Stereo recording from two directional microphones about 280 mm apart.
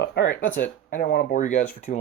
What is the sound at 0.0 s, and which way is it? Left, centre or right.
Speech, left.